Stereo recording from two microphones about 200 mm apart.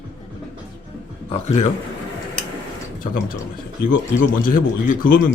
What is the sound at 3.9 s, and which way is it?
Speech, 45° left (ahead or behind).